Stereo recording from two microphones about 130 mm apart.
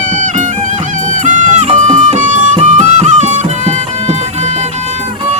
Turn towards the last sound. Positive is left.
turn(degrees=-65)  # may be behind; listen again after turning